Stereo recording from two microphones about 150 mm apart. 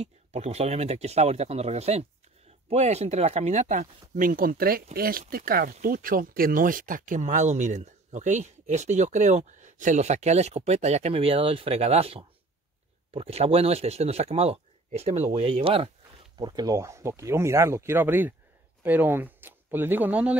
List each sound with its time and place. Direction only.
0.0 s speech: 45° right (ahead or behind); by 20.3 s 10° right (ahead or behind)